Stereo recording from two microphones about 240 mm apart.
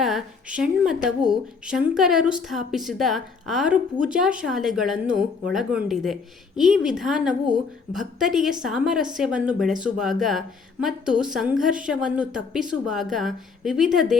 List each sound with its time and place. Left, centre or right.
0.0 s a woman's voice: centre